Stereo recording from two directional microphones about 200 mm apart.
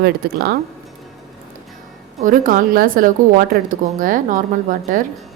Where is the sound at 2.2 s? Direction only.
40° right (ahead or behind).